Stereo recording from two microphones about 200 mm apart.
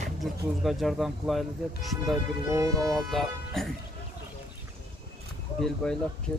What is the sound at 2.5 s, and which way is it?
Speech, 15° right (ahead or behind).